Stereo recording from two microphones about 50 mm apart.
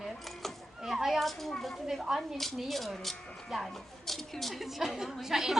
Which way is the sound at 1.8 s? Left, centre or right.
Centre.